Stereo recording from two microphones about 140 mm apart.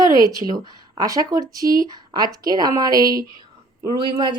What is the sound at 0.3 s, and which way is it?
Speech, 25° right (ahead or behind).